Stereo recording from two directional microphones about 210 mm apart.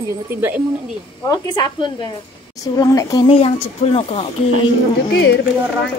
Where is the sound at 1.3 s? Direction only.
20° left (ahead or behind).